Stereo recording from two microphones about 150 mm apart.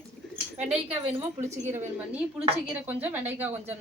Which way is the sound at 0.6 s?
10° right (ahead or behind).